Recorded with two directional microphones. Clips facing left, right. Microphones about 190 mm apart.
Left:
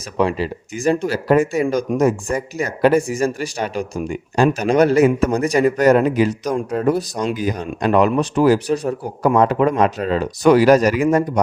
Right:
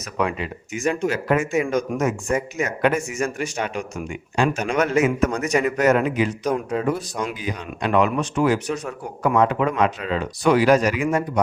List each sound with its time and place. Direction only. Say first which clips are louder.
0.2 s a man's voice: left 5 dB; 35° left (ahead or behind)
6.7 s speech: left 4 dB; 5° left (ahead or behind)
7.3 s a man's voice: left 7 dB; 40° left (ahead or behind)